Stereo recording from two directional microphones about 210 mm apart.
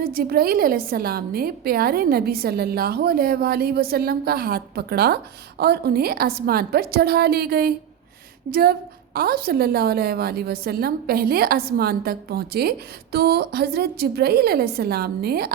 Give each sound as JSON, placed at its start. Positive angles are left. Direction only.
{"t": 0.0, "sound": "a woman's voice", "side_deg": -45}